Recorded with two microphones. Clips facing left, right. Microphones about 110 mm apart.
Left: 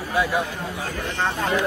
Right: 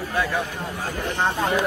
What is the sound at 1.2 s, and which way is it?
Speech, 15° right (ahead or behind).